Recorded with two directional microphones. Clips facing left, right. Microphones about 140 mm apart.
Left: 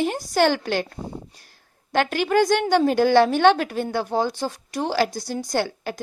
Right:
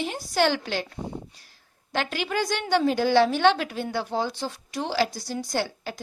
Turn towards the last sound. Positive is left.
turn(degrees=50)  # may be behind; listen again after turning